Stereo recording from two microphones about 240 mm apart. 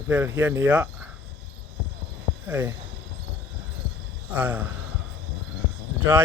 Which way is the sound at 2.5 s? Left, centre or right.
Centre.